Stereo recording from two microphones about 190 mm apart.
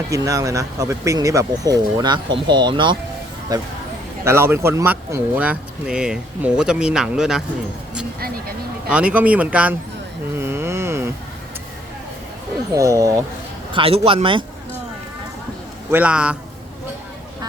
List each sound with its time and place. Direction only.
0.1 s speech: 15° right (ahead or behind)
8.9 s speech: 5° right (ahead or behind)
10.3 s a sound: 10° right (ahead or behind)
12.7 s speech: 15° right (ahead or behind)
13.7 s speech: 30° right (ahead or behind)
15.9 s speech: 10° right (ahead or behind)